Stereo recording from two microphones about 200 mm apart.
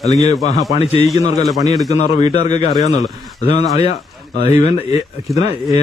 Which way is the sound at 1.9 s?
30° left (ahead or behind).